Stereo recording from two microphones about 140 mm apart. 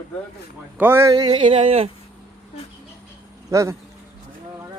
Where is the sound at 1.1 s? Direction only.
35° right (ahead or behind).